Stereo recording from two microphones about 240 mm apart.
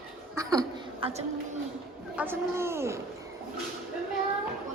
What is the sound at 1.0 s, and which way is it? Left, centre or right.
Speech, right.